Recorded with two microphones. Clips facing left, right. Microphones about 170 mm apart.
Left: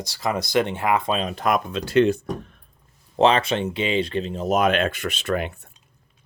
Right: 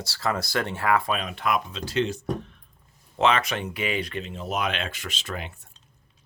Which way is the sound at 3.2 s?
30° left (ahead or behind).